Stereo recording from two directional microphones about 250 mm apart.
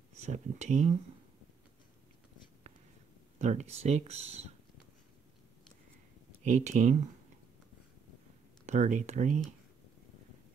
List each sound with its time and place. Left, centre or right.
0.2 s speech: right
3.3 s speech: right
6.5 s speech: right
8.6 s speech: right